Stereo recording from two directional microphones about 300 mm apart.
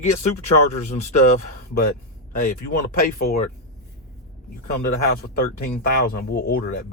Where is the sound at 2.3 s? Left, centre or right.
Left.